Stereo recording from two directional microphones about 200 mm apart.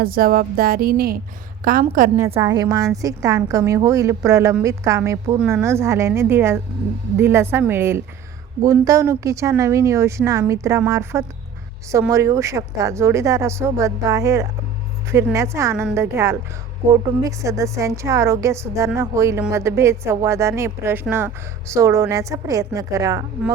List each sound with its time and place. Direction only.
0.0 s a woman's voice: 45° right (ahead or behind)
1.8 s a woman's voice: 35° right (ahead or behind)
2.3 s speech: 20° right (ahead or behind)